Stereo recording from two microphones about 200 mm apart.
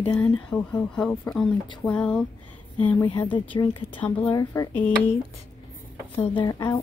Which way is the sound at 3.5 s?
20° left (ahead or behind).